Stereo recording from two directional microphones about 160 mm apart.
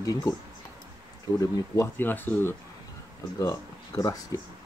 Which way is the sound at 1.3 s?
20° left (ahead or behind).